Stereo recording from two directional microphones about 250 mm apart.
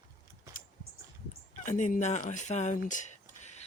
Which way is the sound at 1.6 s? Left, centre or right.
Left.